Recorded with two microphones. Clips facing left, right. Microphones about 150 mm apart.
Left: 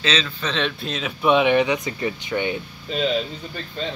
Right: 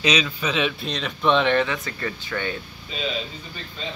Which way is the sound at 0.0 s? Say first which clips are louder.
Right 2 dB; 15° right (ahead or behind).